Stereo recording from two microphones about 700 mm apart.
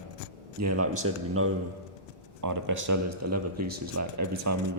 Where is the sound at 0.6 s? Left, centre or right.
Right.